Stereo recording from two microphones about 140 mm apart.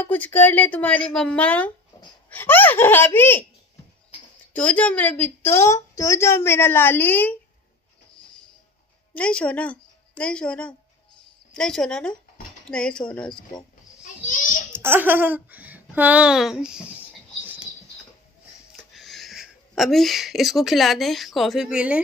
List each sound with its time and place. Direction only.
0.0 s a woman's voice: 15° left (ahead or behind)
4.6 s a woman's voice: 10° left (ahead or behind)
9.1 s a woman's voice: 10° left (ahead or behind)
14.2 s a sound: 70° left (ahead or behind)
14.7 s speech: 15° right (ahead or behind)
18.9 s speech: centre (ahead or behind)